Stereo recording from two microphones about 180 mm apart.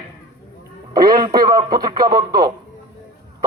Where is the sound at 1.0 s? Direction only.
25° right (ahead or behind).